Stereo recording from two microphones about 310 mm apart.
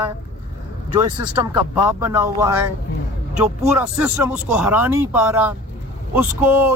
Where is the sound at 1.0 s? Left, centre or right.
Centre.